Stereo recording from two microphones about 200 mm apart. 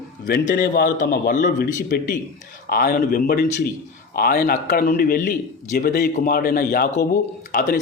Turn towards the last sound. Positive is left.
turn(degrees=45)  # may be behind; listen again after turning